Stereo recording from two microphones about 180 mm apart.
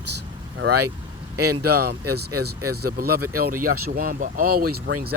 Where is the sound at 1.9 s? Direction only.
65° right (ahead or behind).